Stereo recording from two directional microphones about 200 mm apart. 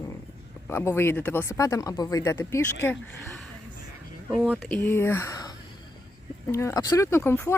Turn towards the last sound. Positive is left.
turn(degrees=10)  # may be behind; listen again after turning